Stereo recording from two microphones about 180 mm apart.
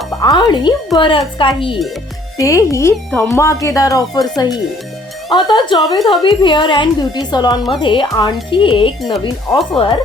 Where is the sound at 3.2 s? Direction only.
15° left (ahead or behind).